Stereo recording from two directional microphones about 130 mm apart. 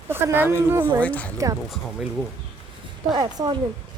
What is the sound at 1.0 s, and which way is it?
Speech, 10° left (ahead or behind).